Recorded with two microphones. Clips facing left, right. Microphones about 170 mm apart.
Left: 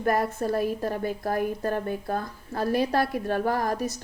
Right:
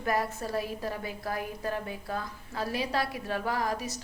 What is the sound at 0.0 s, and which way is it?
A woman's voice, 50° left (ahead or behind).